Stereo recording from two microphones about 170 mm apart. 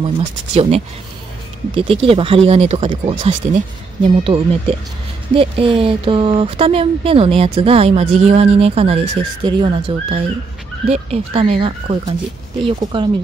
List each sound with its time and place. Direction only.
0.5 s speech: 35° right (ahead or behind)